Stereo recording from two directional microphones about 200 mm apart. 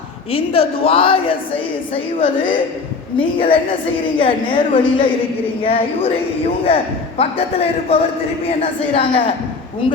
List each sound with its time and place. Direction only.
0.3 s a woman's voice: 30° left (ahead or behind)